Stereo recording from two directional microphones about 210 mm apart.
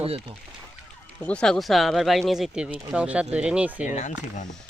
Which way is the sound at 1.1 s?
5° left (ahead or behind).